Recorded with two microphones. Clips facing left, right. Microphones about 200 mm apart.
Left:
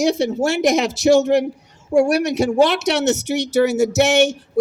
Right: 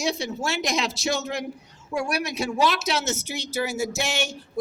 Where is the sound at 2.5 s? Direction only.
65° left (ahead or behind).